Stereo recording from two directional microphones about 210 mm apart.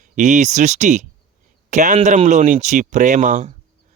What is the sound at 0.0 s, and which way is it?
Speech, 35° right (ahead or behind).